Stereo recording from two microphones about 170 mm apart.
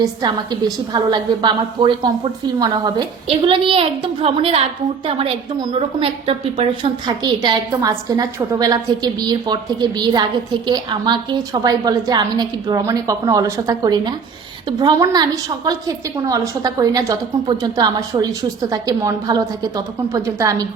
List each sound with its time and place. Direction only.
0.0 s a woman's voice: 25° right (ahead or behind)